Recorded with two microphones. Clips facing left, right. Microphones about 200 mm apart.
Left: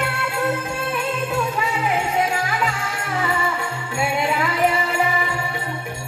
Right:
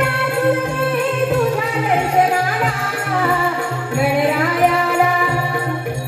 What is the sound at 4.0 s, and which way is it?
Music, 50° right (ahead or behind).